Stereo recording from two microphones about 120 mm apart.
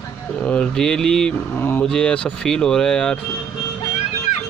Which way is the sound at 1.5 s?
15° left (ahead or behind).